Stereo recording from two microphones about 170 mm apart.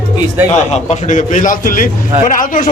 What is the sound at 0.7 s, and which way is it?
A man's voice, 45° left (ahead or behind).